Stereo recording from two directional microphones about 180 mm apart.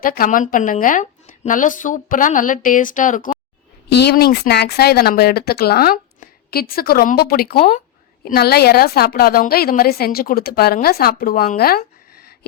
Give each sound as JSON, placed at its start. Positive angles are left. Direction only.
{"t": 0.0, "sound": "speech", "side_deg": 50}
{"t": 3.8, "sound": "a woman's voice", "side_deg": 70}